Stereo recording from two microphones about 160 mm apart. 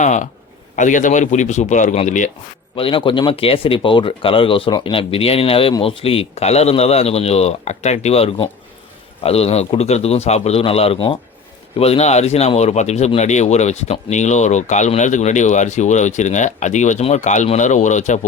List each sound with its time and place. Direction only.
0.0 s speech: 50° left (ahead or behind)
2.7 s speech: 35° left (ahead or behind); by 18.3 s 50° left (ahead or behind)